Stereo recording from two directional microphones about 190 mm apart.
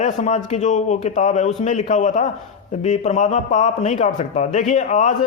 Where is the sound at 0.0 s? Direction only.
40° left (ahead or behind).